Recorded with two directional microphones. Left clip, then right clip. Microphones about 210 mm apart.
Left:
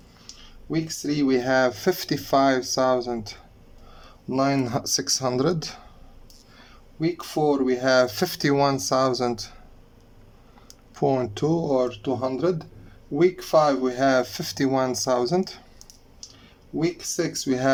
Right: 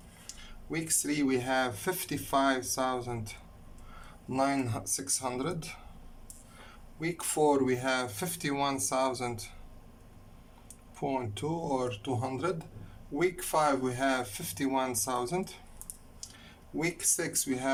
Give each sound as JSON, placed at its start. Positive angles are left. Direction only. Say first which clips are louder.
{"t": 1.0, "sound": "speech", "louder": "left 9 dB", "side_deg": 25}
{"t": 7.2, "sound": "speech", "louder": "left 3 dB", "side_deg": 20}
{"t": 10.9, "sound": "speech", "louder": "left 11 dB", "side_deg": 35}
{"t": 17.2, "sound": "speech", "louder": "left 8 dB", "side_deg": 25}